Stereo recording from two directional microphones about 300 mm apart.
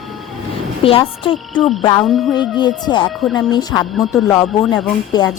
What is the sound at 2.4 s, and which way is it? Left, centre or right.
Speech, centre.